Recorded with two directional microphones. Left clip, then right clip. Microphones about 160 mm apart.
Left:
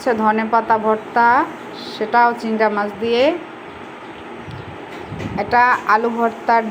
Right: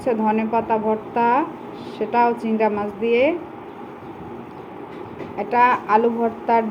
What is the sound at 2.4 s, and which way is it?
Speech, 45° left (ahead or behind).